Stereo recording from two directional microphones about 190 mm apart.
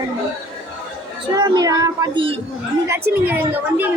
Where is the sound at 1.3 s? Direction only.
20° right (ahead or behind).